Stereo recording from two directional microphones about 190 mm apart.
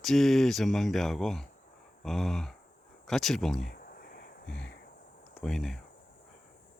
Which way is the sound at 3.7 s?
50° left (ahead or behind).